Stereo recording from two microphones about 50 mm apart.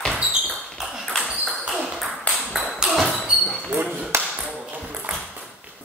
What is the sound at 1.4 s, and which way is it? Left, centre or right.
Ping, centre.